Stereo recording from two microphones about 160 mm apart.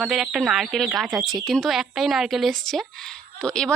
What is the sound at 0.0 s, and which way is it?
Speech, centre (ahead or behind).